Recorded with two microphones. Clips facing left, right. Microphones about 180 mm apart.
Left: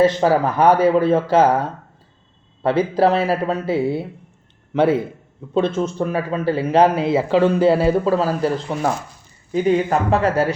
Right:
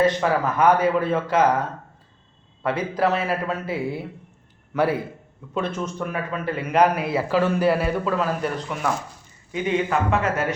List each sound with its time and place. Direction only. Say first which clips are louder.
0.0 s speech: left 5 dB; 30° left (ahead or behind)
2.6 s speech: left 6 dB; 30° left (ahead or behind)